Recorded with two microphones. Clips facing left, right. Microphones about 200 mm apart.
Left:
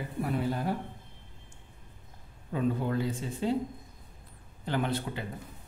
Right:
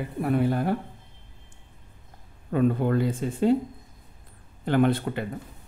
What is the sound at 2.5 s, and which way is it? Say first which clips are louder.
Speech: right 7 dB; 60° right (ahead or behind).